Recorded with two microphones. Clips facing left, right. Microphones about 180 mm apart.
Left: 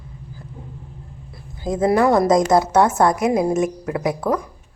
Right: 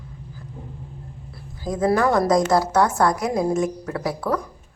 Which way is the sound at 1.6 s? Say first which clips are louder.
Left 3 dB; 25° left (ahead or behind).